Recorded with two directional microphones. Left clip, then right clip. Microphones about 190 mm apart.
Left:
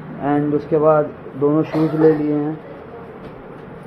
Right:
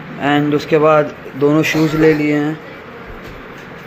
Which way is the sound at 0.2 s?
20° right (ahead or behind).